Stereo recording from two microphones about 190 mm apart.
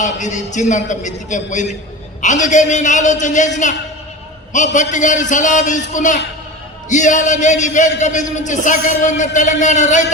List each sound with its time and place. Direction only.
0.0 s a man's voice: 40° left (ahead or behind)
4.5 s a man's voice: 40° left (ahead or behind)